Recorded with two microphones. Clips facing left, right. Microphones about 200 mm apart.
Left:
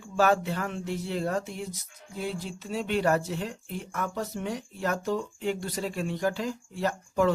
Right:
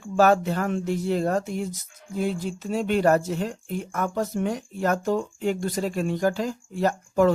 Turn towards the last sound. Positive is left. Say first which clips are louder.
# right 5 dB
turn(degrees=-45)  # may be behind; listen again after turning